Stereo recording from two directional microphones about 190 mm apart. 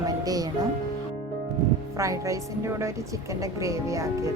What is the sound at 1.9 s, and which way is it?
Speech, 15° right (ahead or behind).